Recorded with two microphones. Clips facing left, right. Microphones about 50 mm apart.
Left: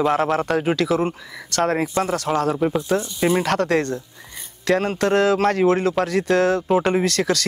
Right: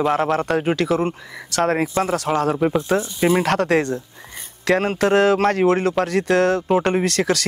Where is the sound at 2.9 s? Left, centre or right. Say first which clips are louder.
Right 1 dB; right; by 7.4 s centre.